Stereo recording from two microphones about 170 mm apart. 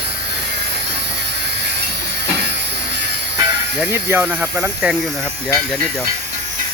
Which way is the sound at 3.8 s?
15° right (ahead or behind).